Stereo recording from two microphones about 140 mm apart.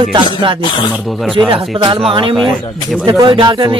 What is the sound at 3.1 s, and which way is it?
Music, 30° right (ahead or behind).